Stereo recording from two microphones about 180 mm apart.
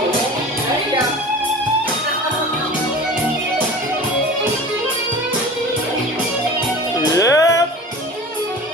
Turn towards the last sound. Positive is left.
turn(degrees=20)  # may be behind; listen again after turning